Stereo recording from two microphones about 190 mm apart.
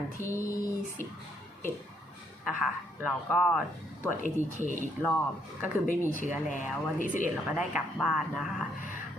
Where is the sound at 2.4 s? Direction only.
5° right (ahead or behind).